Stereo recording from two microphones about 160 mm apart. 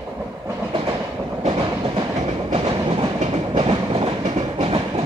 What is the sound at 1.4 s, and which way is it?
Train, 35° right (ahead or behind).